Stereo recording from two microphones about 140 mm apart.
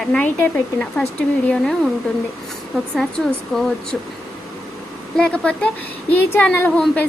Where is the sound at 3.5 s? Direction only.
5° left (ahead or behind).